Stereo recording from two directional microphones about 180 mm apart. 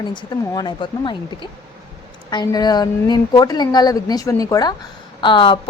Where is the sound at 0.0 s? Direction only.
25° left (ahead or behind).